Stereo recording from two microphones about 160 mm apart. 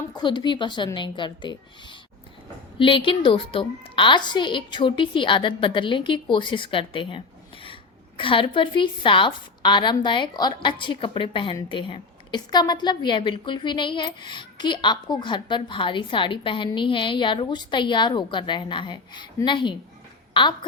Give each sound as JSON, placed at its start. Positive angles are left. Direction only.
{"t": 0.1, "sound": "a woman's voice", "side_deg": 30}